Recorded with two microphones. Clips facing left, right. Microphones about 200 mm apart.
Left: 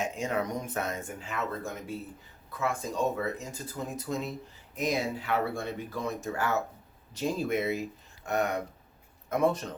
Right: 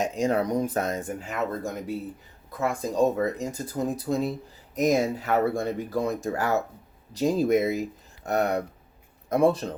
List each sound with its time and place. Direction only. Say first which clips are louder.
0.0 s speech: right 6 dB; 35° right (ahead or behind)